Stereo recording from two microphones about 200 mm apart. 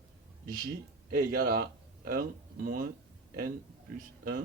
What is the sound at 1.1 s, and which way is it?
Speech, 50° right (ahead or behind).